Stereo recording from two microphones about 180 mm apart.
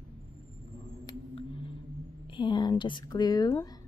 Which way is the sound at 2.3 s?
25° left (ahead or behind).